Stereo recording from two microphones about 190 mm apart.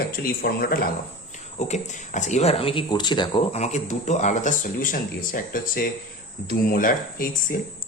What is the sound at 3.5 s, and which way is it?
Speech, 35° left (ahead or behind).